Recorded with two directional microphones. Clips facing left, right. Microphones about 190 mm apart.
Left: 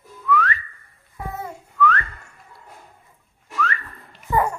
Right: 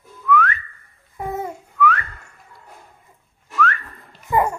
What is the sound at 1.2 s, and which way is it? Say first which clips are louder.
Babbling: right 5 dB; 20° right (ahead or behind).